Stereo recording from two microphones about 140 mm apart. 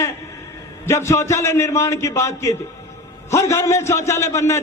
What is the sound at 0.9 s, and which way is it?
A man's voice, 20° left (ahead or behind).